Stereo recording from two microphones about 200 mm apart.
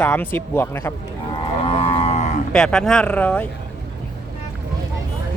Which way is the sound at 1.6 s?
25° left (ahead or behind).